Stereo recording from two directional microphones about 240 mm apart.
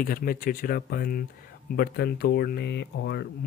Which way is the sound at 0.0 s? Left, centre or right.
Left.